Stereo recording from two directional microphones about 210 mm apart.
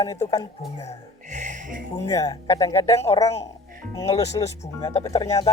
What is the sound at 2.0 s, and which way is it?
Speech, 15° left (ahead or behind).